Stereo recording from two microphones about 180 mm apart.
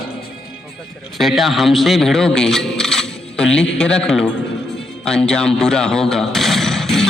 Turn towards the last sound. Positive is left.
turn(degrees=0)  # may be behind; listen again after turning